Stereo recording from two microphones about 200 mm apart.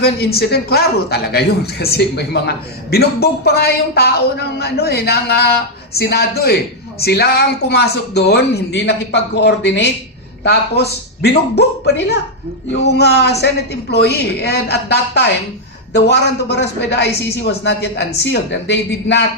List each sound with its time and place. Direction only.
0.0 s a woman's voice: 50° left (ahead or behind)